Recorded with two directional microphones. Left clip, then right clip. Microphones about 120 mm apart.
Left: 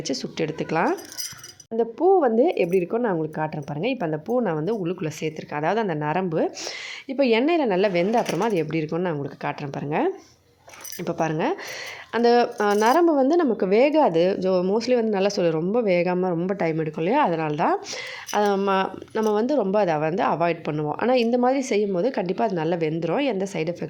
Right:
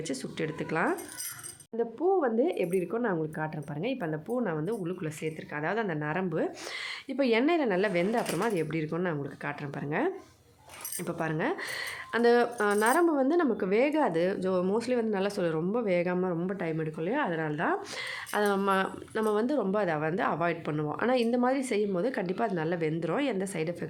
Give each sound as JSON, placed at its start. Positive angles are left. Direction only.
{"t": 0.1, "sound": "a woman's voice", "side_deg": 30}
{"t": 14.8, "sound": "speech", "side_deg": 30}
{"t": 17.9, "sound": "a woman's voice", "side_deg": 25}